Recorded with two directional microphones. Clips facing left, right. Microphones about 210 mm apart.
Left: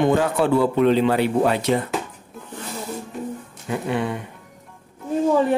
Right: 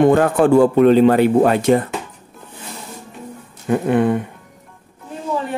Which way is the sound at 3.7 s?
50° right (ahead or behind).